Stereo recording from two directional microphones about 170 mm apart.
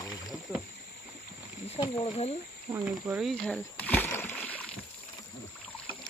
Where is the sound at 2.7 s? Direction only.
10° right (ahead or behind); by 4.6 s 10° left (ahead or behind).